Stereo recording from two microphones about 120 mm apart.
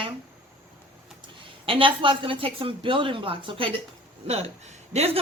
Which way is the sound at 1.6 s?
50° right (ahead or behind).